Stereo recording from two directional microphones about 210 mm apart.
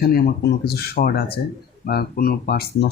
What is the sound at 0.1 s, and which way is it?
Speech, 50° left (ahead or behind).